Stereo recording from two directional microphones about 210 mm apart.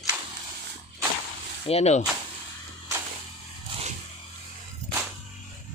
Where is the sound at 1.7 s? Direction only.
30° left (ahead or behind).